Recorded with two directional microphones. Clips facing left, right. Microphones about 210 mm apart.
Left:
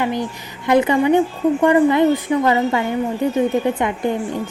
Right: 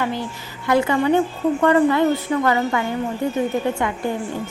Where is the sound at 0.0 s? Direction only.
15° left (ahead or behind).